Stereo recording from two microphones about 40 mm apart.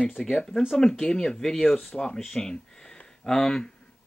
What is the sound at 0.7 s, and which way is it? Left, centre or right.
Speech, centre.